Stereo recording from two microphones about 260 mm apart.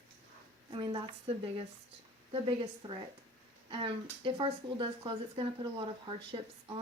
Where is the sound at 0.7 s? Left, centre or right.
Centre.